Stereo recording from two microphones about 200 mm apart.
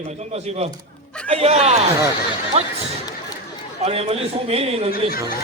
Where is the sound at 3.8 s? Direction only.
30° right (ahead or behind).